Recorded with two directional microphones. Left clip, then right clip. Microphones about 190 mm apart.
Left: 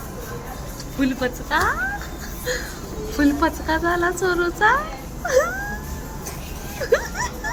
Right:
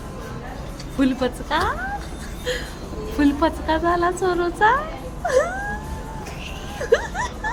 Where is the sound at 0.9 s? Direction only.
15° right (ahead or behind).